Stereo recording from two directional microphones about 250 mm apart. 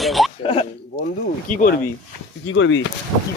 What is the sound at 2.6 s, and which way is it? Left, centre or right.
Speech, left.